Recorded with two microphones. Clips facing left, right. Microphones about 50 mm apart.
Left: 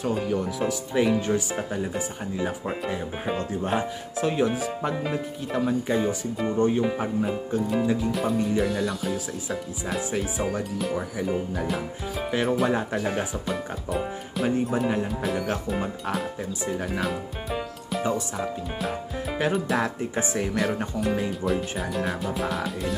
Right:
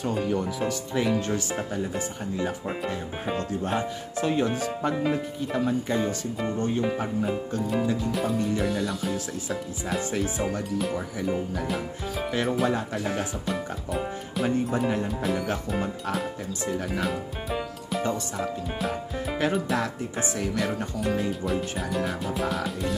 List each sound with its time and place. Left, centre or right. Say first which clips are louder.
0.0 s speech: left 1 dB; centre
6.5 s music: left 6 dB; centre
6.8 s speech: left 2 dB; centre
19.8 s music: left 2 dB; left
20.5 s speech: left 2 dB; centre